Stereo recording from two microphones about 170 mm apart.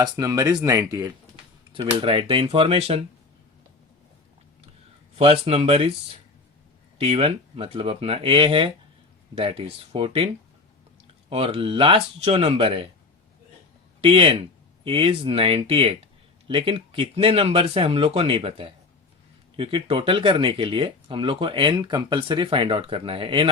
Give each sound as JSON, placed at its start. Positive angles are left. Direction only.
{"t": 0.0, "sound": "speech", "side_deg": -20}
{"t": 2.0, "sound": "speech", "side_deg": -30}
{"t": 5.1, "sound": "speech", "side_deg": -35}
{"t": 7.0, "sound": "speech", "side_deg": -35}
{"t": 11.3, "sound": "speech", "side_deg": -35}
{"t": 14.0, "sound": "speech", "side_deg": -35}